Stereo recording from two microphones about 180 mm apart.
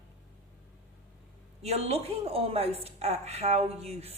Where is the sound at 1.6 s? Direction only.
35° right (ahead or behind).